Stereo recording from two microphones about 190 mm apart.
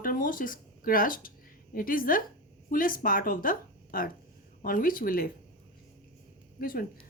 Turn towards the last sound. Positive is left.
turn(degrees=50)  # may be behind; listen again after turning